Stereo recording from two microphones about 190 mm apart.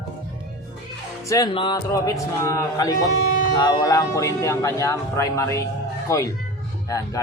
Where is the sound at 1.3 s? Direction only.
20° left (ahead or behind).